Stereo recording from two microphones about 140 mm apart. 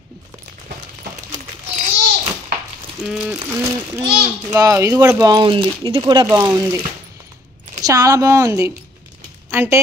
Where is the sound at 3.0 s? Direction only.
5° right (ahead or behind).